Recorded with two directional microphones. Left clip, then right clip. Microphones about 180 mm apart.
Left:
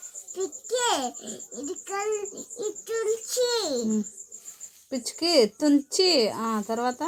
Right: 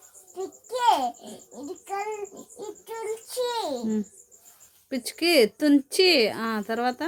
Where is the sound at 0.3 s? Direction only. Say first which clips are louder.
Left 2 dB; 15° right (ahead or behind).